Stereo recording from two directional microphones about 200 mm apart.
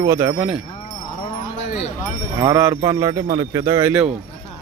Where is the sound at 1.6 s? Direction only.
35° left (ahead or behind).